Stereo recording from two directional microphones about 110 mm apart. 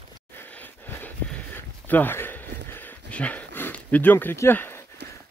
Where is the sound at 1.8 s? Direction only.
15° left (ahead or behind).